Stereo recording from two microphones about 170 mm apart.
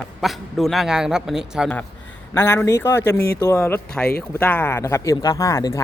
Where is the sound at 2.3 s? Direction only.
15° left (ahead or behind).